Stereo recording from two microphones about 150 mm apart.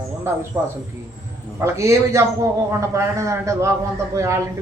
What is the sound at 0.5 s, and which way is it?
A man's voice, 25° right (ahead or behind).